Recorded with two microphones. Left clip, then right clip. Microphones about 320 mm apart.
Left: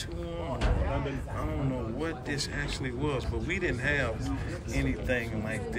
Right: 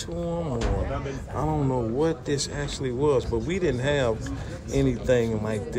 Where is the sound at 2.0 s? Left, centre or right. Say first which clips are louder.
Right 8 dB; centre.